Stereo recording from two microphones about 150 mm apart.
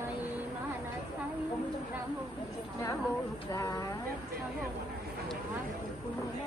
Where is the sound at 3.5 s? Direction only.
25° left (ahead or behind).